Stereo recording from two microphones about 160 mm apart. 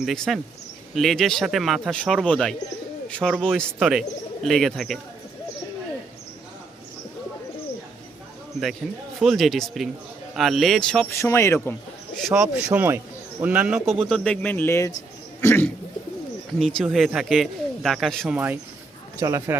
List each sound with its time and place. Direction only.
0.0 s speech: centre (ahead or behind)
3.2 s a man's voice: 10° right (ahead or behind)
3.4 s speech: centre (ahead or behind)
9.2 s speech: centre (ahead or behind)
11.1 s speech: 15° left (ahead or behind)
12.1 s speech: centre (ahead or behind)
12.6 s a man's voice: 10° right (ahead or behind); by 15.7 s 15° left (ahead or behind)
16.6 s speech: centre (ahead or behind)
18.3 s a man's voice: 10° right (ahead or behind)